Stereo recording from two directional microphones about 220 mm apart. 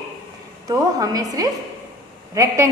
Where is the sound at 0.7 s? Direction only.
15° right (ahead or behind).